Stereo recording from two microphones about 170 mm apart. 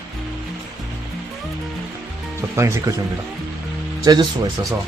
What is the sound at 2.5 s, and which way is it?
Speech, 15° right (ahead or behind).